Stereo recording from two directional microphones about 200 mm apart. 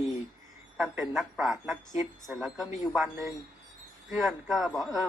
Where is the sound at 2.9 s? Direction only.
10° right (ahead or behind).